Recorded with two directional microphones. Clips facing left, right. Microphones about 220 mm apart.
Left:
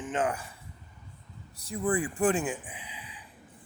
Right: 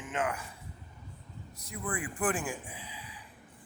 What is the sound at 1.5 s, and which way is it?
Speech, 30° left (ahead or behind).